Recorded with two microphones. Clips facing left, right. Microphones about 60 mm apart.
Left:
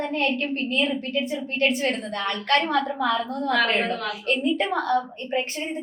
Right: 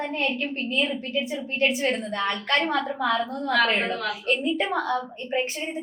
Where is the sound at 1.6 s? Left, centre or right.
Left.